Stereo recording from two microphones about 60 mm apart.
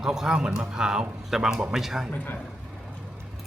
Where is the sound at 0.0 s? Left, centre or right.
Centre.